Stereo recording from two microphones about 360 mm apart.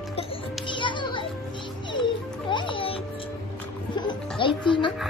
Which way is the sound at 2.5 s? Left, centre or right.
Centre.